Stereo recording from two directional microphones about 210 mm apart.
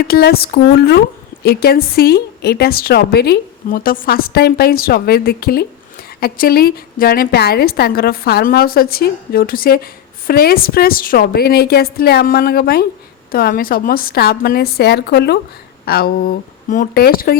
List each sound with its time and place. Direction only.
0.1 s a woman's voice: 45° left (ahead or behind)